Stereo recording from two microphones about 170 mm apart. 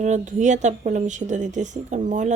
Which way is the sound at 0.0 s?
45° right (ahead or behind).